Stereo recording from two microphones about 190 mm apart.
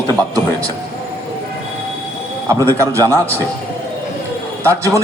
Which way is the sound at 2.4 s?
15° right (ahead or behind).